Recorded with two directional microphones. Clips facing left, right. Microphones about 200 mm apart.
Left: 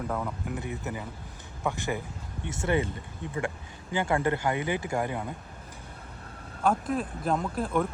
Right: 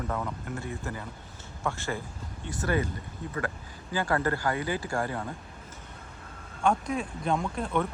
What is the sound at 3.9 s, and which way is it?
Speech, 20° left (ahead or behind).